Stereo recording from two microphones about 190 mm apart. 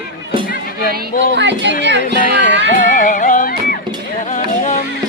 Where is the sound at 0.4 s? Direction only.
50° left (ahead or behind).